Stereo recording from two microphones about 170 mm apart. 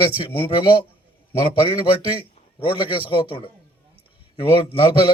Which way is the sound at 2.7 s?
30° left (ahead or behind).